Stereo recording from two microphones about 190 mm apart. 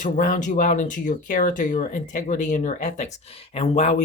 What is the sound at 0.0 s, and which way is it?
Speech, 45° left (ahead or behind).